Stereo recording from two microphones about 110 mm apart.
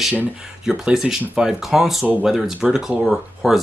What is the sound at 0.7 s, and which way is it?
Speech, 5° right (ahead or behind).